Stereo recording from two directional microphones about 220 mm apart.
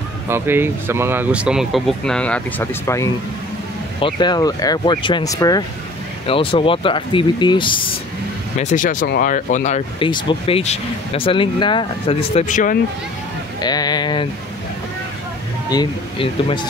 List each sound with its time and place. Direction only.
0.3 s speech: 10° right (ahead or behind); by 7.9 s 20° left (ahead or behind)
8.5 s speech: 35° left (ahead or behind)
13.6 s speech: 20° left (ahead or behind)
15.7 s speech: 20° left (ahead or behind)